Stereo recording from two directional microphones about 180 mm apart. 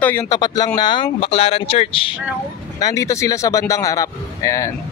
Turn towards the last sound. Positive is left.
turn(degrees=15)  # may be behind; listen again after turning